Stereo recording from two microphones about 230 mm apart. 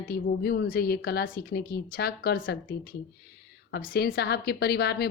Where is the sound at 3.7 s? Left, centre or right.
Left.